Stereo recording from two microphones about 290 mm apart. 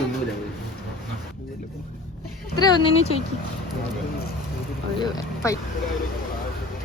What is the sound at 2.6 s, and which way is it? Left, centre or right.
Speech, centre.